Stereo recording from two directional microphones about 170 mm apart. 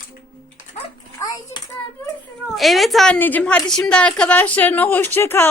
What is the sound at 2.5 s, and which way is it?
A woman's voice, centre (ahead or behind).